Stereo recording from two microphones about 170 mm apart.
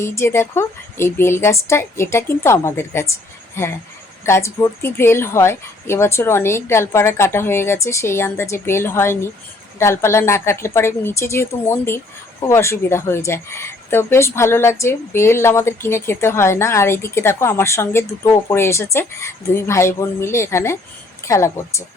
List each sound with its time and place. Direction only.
0.0 s a woman's voice: 15° left (ahead or behind)